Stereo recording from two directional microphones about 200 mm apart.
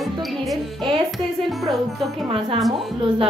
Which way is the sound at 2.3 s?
25° right (ahead or behind).